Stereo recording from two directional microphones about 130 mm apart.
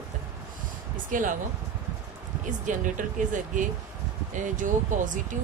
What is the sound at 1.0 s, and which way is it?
Speech, 90° right.